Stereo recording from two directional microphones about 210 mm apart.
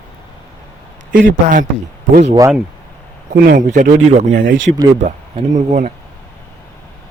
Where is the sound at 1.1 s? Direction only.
40° right (ahead or behind).